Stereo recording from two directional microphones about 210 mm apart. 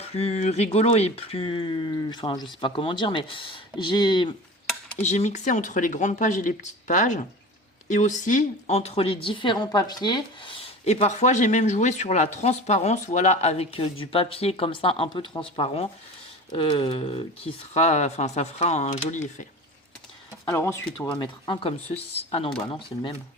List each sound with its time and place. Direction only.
0.0 s a woman's voice: 30° left (ahead or behind)
5.0 s a woman's voice: 35° left (ahead or behind)
20.4 s a woman's voice: 10° left (ahead or behind); by 22.4 s 30° left (ahead or behind)